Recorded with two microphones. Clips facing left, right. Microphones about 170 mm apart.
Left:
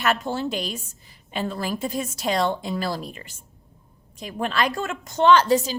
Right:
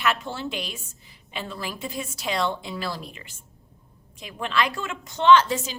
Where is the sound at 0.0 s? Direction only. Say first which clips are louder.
Left 3 dB; 40° left (ahead or behind).